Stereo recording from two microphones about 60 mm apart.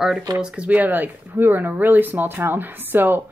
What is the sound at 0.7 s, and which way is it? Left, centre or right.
Speech, right.